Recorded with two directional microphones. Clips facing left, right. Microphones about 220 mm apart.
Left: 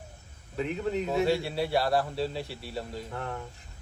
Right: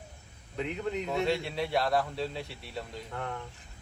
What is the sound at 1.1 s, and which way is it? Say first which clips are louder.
Speech: left 3 dB; 5° left (ahead or behind).